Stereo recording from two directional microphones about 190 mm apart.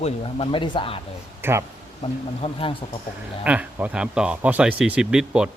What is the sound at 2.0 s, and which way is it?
Speech, 30° left (ahead or behind).